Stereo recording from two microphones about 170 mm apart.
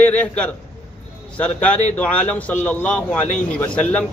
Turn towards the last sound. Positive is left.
turn(degrees=10)  # may be behind; listen again after turning